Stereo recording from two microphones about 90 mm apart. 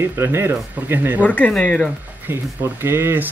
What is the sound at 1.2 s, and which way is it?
Speech, 15° left (ahead or behind).